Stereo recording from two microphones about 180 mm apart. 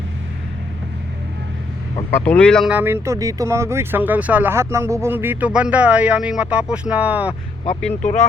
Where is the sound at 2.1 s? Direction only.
10° left (ahead or behind).